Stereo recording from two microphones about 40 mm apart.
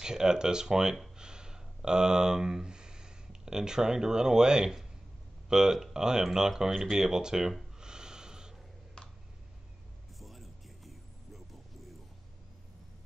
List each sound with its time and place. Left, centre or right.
0.0 s speech: centre
1.1 s a sound: centre
5.5 s speech: centre
7.8 s snort: centre
10.1 s music: centre